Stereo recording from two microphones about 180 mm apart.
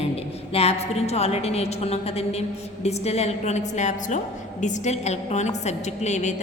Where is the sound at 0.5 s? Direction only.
35° left (ahead or behind).